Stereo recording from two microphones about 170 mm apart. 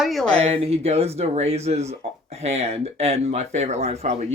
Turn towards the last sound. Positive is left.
turn(degrees=-40)  # may be behind; listen again after turning